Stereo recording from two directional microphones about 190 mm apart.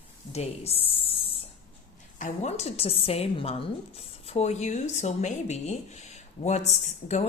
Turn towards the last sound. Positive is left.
turn(degrees=35)  # may be behind; listen again after turning